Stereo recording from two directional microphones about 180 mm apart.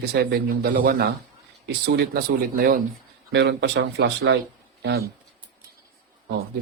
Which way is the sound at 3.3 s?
75° right (ahead or behind).